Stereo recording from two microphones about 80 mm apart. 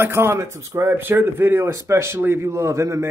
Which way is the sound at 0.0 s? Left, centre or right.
Right.